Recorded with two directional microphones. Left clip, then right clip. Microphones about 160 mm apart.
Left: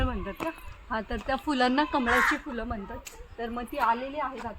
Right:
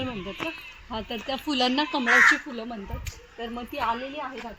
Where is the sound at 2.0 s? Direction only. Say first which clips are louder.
Right 9 dB; 25° left (ahead or behind).